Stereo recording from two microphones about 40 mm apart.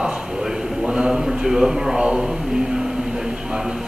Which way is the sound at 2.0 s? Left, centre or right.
Right.